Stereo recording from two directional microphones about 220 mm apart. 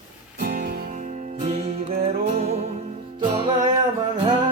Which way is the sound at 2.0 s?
30° right (ahead or behind).